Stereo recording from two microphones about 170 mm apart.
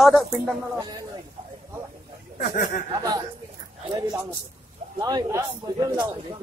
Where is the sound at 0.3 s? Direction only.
20° right (ahead or behind).